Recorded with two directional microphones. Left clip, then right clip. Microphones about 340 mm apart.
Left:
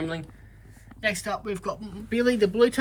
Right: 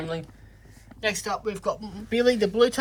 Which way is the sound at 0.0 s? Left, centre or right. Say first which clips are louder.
Even; centre.